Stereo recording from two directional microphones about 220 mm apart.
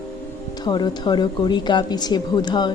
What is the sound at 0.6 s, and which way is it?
Music, 20° left (ahead or behind).